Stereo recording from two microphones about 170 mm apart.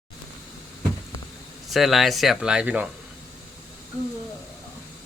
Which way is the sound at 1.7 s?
Centre (ahead or behind).